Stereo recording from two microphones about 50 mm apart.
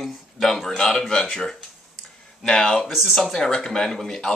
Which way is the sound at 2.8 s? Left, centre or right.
Centre.